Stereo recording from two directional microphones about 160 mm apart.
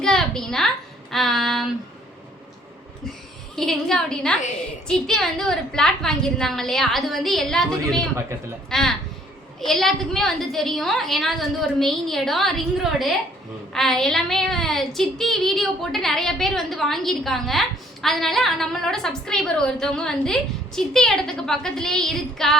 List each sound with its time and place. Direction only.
0.0 s a sound: 5° left (ahead or behind)
1.1 s child singing: centre (ahead or behind)
3.5 s child singing: centre (ahead or behind)